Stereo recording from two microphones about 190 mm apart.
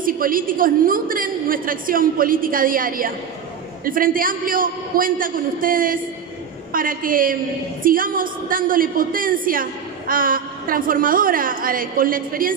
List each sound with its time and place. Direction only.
0.0 s a woman's voice: 50° right (ahead or behind)